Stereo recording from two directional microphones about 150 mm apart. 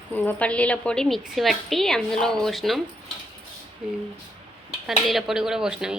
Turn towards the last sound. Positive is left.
turn(degrees=-5)  # may be behind; listen again after turning